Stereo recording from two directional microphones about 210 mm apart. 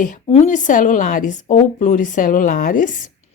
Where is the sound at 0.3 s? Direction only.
30° left (ahead or behind).